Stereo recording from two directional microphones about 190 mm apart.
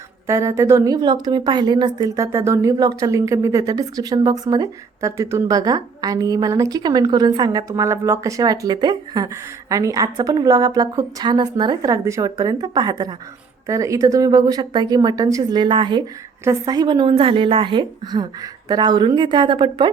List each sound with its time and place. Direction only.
0.3 s a woman's voice: 15° right (ahead or behind)